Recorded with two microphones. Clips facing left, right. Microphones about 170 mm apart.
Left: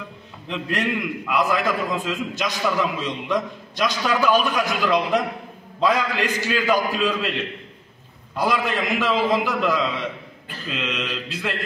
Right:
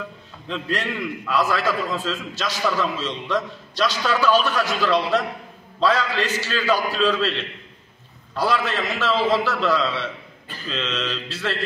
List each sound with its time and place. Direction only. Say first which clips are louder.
0.5 s a man's voice: left 2 dB; 15° left (ahead or behind)
8.4 s a man's voice: even; 15° left (ahead or behind)